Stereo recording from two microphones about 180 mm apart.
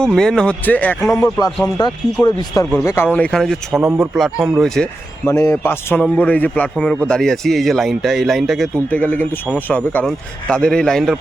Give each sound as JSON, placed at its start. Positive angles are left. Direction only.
{"t": 0.0, "sound": "speech", "side_deg": 5}
{"t": 1.1, "sound": "speech", "side_deg": 20}
{"t": 5.2, "sound": "a man's voice", "side_deg": 15}